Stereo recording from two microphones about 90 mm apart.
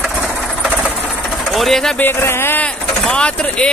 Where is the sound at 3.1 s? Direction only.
10° left (ahead or behind).